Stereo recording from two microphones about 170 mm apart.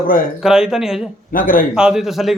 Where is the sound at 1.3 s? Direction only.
55° left (ahead or behind).